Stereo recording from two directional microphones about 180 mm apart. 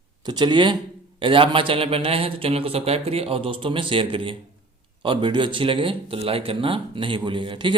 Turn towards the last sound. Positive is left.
turn(degrees=-30)  # may be behind; listen again after turning